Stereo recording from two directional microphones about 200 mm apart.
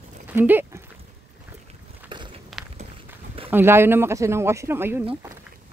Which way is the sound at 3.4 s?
10° right (ahead or behind).